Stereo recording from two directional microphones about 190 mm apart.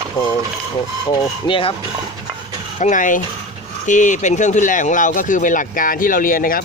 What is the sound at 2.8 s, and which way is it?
Speech, 45° left (ahead or behind).